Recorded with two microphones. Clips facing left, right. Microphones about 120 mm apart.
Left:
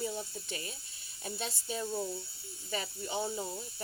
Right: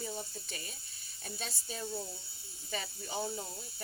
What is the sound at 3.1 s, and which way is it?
Speech, 20° left (ahead or behind).